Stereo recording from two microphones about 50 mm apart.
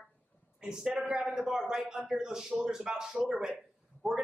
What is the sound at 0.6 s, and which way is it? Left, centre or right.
Speech, centre.